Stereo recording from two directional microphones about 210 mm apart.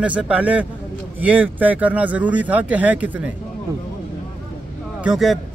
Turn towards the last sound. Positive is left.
turn(degrees=0)  # may be behind; listen again after turning